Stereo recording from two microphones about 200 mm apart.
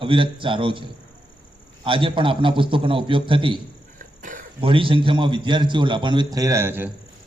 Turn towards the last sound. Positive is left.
turn(degrees=-10)  # may be behind; listen again after turning